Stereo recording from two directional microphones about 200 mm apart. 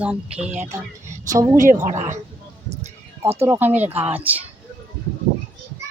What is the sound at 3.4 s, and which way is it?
Speech, 10° right (ahead or behind).